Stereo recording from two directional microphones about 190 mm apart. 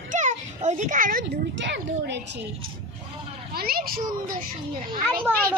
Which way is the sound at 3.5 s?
55° right (ahead or behind).